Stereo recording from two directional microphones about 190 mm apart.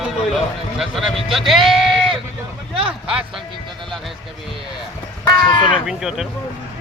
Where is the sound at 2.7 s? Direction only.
30° right (ahead or behind).